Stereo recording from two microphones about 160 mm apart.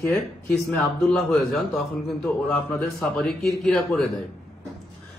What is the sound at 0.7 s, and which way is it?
Speech, centre (ahead or behind).